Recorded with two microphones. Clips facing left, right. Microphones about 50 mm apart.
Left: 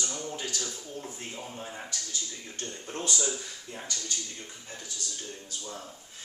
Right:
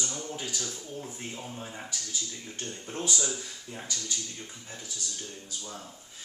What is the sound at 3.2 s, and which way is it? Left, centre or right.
Speech, centre.